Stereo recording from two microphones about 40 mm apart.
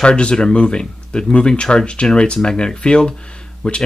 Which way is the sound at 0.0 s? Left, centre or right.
Left.